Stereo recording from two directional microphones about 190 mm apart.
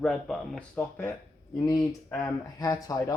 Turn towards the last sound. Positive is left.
turn(degrees=20)  # may be behind; listen again after turning